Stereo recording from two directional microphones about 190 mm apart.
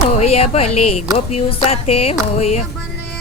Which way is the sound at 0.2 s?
35° left (ahead or behind).